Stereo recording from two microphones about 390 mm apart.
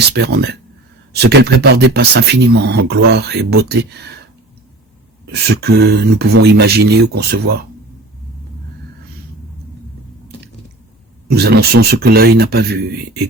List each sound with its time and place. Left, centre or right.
0.1 s speech: right
5.2 s speech: right
11.3 s speech: right